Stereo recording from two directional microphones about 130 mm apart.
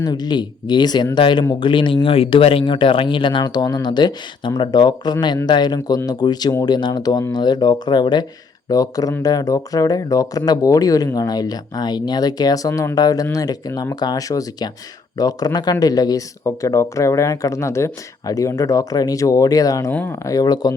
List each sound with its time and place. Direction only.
0.0 s speech: 30° left (ahead or behind)
19.9 s speech: 10° left (ahead or behind)
20.2 s speech: 30° left (ahead or behind)